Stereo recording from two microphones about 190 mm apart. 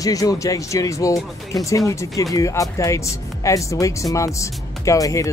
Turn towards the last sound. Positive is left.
turn(degrees=15)  # may be behind; listen again after turning